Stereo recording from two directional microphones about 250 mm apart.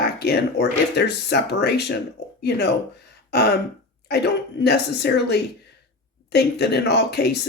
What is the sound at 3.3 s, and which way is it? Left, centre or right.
Throat clearing, left.